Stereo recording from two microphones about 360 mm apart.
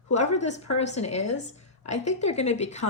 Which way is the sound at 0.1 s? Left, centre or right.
Centre.